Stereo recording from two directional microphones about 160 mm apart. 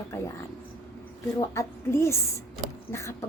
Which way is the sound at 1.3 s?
20° left (ahead or behind).